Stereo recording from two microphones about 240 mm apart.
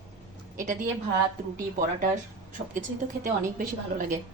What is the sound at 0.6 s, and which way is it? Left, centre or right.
Speech, right.